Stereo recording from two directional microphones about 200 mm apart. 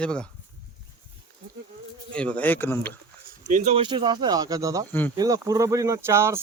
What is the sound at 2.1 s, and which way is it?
Speech, 5° left (ahead or behind).